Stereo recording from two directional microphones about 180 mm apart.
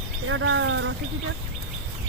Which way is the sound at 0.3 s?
90° right.